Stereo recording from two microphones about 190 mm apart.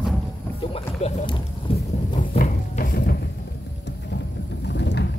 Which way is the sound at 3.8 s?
65° left (ahead or behind).